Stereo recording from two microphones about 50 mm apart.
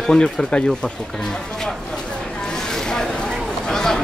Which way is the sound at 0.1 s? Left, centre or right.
Centre.